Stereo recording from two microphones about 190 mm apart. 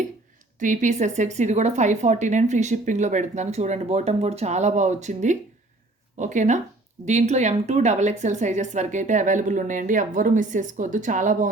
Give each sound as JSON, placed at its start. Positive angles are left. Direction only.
{"t": 0.6, "sound": "a woman's voice", "side_deg": -40}